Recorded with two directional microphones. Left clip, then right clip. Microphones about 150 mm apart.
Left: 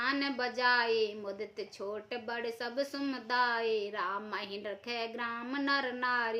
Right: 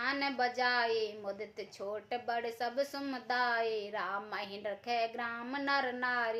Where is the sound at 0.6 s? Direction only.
20° left (ahead or behind).